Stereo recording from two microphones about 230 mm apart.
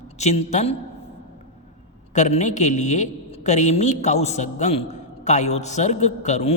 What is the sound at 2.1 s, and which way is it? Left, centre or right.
A man's voice, left.